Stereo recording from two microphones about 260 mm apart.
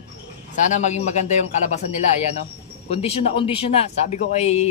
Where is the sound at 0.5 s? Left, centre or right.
Left.